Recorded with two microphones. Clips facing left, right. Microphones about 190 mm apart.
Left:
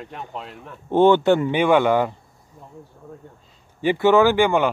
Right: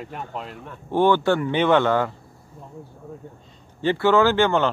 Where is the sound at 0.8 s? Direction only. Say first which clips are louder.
Left 4 dB; 20° left (ahead or behind).